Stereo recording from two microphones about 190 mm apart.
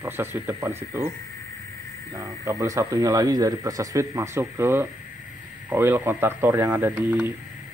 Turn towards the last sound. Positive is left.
turn(degrees=-10)  # may be behind; listen again after turning